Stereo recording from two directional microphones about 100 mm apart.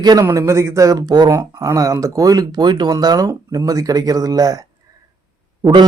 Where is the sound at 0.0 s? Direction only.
40° right (ahead or behind).